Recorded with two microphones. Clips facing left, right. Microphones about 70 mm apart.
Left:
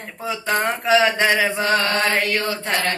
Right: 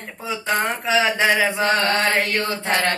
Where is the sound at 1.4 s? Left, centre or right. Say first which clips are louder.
Even; centre.